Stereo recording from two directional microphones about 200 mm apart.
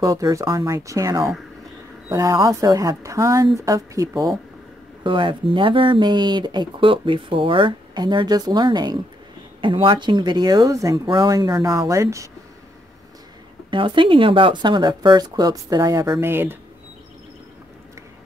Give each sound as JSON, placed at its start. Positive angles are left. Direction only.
{"t": 0.0, "sound": "speech", "side_deg": -15}
{"t": 13.7, "sound": "speech", "side_deg": -25}